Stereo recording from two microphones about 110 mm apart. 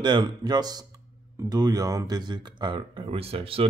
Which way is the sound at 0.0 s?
45° right (ahead or behind).